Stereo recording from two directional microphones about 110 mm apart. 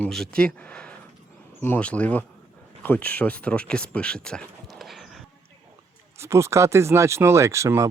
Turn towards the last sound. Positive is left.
turn(degrees=-25)  # may be behind; listen again after turning